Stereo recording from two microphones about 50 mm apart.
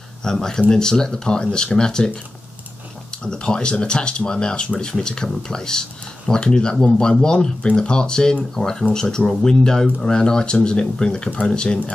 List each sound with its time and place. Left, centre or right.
0.2 s speech: centre
3.3 s speech: centre